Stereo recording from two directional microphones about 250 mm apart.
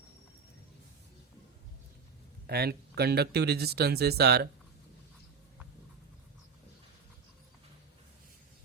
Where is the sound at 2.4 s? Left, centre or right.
Right.